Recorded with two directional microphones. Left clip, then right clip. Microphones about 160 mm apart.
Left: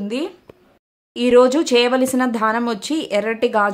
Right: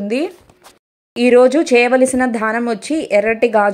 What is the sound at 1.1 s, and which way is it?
A woman's voice, 25° right (ahead or behind).